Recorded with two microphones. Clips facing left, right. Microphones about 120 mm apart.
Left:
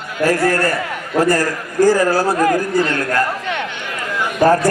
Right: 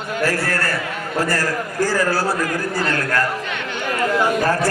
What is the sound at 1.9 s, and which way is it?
Speech, 15° left (ahead or behind).